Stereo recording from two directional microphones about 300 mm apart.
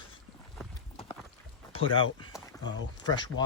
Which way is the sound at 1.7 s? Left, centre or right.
Centre.